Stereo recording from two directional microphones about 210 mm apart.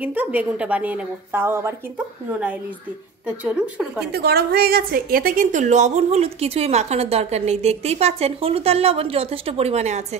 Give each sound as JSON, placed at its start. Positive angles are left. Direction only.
{"t": 0.0, "sound": "a woman's voice", "side_deg": -5}
{"t": 3.4, "sound": "a woman's voice", "side_deg": -5}
{"t": 4.1, "sound": "a woman's voice", "side_deg": -50}